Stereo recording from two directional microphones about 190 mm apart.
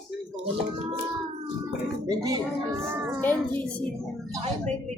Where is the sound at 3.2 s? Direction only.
10° left (ahead or behind).